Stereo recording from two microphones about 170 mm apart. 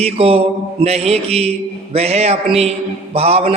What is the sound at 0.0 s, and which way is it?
Mantra, 35° right (ahead or behind).